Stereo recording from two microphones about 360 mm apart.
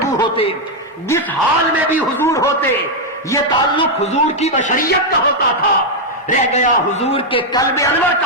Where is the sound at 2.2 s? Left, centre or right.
Centre.